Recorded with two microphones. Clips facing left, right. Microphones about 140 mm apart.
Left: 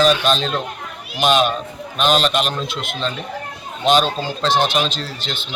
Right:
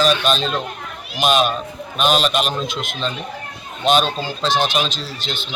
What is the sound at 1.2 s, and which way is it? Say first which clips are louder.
A man's voice: left 1 dB; 10° right (ahead or behind).